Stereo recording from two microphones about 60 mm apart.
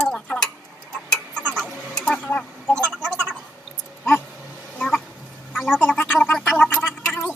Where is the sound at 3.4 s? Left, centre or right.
Centre.